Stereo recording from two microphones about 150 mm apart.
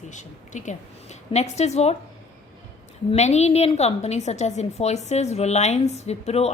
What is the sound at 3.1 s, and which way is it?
A woman's voice, 45° left (ahead or behind).